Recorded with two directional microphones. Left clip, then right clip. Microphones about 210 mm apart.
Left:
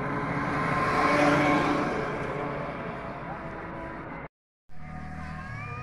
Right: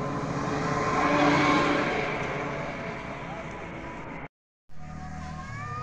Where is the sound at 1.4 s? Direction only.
50° left (ahead or behind); by 3.5 s 30° left (ahead or behind).